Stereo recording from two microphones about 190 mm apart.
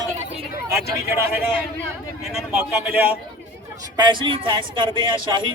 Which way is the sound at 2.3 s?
5° right (ahead or behind).